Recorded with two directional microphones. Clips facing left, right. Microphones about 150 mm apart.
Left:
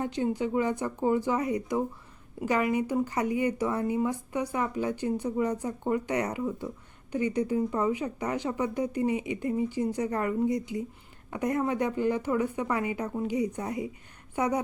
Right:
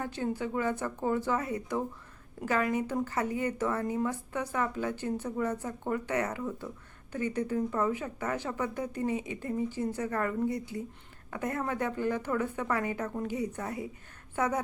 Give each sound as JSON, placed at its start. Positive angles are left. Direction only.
{"t": 0.0, "sound": "speech", "side_deg": 15}